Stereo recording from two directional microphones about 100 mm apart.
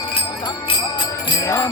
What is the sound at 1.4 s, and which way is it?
Music, 30° left (ahead or behind).